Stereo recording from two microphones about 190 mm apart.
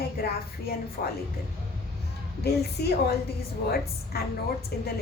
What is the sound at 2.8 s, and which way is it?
Speech, 55° left (ahead or behind).